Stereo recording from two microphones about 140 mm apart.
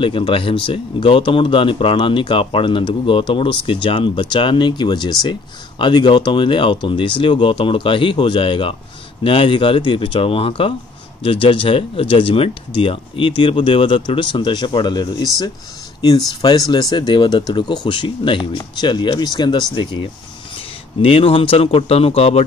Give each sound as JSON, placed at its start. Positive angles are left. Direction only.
{"t": 0.0, "sound": "speech", "side_deg": 40}
{"t": 16.3, "sound": "speech", "side_deg": 25}
{"t": 21.0, "sound": "speech", "side_deg": 45}